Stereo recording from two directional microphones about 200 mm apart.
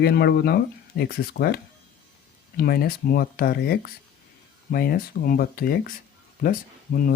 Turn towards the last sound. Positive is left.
turn(degrees=45)  # may be behind; listen again after turning